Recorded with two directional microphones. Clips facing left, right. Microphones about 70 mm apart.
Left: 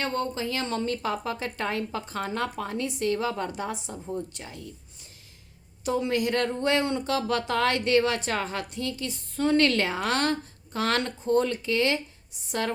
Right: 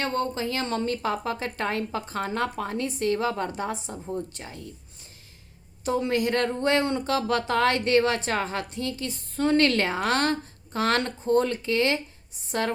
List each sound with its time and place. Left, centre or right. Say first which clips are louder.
0.0 s speech: right 2 dB; right
5.8 s speech: right 1 dB; right